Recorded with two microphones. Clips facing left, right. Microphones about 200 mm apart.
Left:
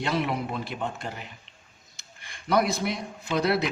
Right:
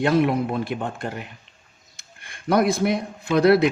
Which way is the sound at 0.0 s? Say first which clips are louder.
Right 8 dB; 50° right (ahead or behind).